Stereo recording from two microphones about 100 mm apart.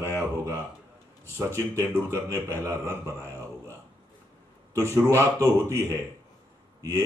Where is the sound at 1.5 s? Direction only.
25° left (ahead or behind).